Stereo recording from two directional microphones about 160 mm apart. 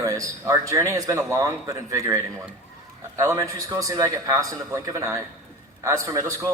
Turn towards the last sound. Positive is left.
turn(degrees=-20)  # may be behind; listen again after turning